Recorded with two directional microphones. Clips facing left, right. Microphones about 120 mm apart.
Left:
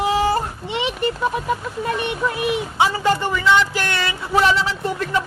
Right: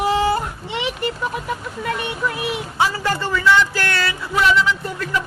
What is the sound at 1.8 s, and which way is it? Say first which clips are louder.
Speech: right 1 dB; 20° left (ahead or behind).